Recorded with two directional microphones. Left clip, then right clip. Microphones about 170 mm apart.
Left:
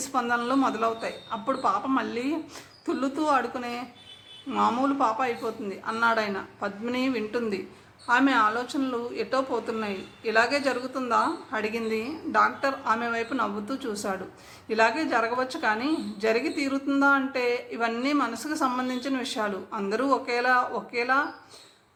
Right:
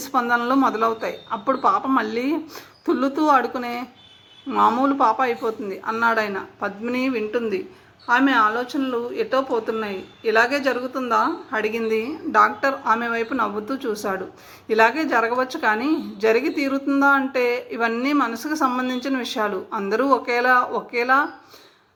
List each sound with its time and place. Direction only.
0.0 s a woman's voice: 25° right (ahead or behind)